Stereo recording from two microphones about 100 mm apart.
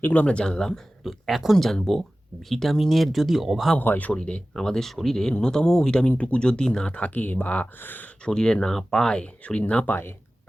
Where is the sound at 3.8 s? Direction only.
15° left (ahead or behind).